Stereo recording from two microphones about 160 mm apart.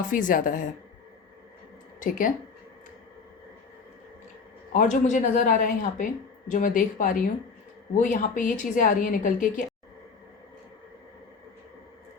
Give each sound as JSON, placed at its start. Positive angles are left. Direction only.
{"t": 0.1, "sound": "a woman's voice", "side_deg": 55}
{"t": 2.0, "sound": "a woman's voice", "side_deg": 55}
{"t": 4.7, "sound": "speech", "side_deg": 50}